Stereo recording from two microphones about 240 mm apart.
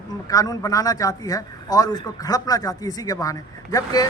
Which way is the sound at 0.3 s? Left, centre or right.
Centre.